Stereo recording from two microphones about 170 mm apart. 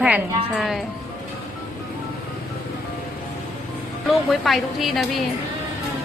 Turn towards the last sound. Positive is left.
turn(degrees=0)  # may be behind; listen again after turning